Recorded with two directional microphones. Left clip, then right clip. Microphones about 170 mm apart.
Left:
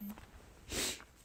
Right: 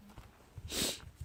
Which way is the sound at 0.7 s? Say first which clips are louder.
Right 2 dB; 5° left (ahead or behind).